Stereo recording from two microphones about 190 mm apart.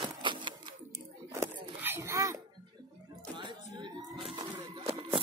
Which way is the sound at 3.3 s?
25° right (ahead or behind).